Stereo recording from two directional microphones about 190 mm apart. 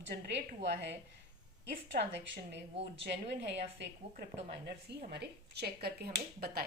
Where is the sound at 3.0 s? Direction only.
65° right (ahead or behind).